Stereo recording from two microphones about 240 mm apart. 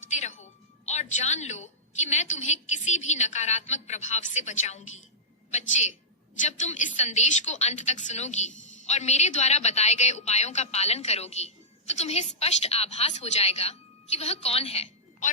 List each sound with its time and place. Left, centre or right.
0.1 s music: left
1.1 s a woman's voice: left